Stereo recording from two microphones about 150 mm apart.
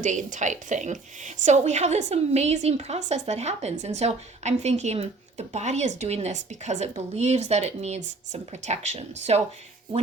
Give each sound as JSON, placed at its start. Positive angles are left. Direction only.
{"t": 0.0, "sound": "a woman's voice", "side_deg": -55}